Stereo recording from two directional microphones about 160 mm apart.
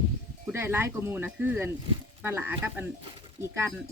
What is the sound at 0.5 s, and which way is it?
Speech, 15° right (ahead or behind).